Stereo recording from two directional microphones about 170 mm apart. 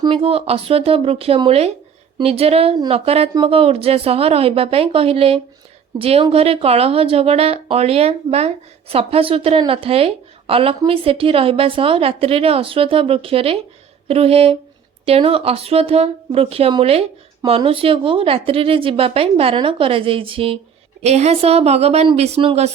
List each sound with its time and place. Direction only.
0.0 s speech: 30° right (ahead or behind)